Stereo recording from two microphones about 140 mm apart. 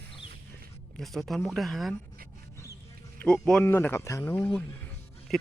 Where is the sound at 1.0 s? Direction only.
Centre (ahead or behind).